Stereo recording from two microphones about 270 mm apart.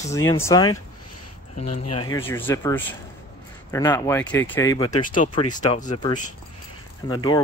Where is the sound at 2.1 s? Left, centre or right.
Centre.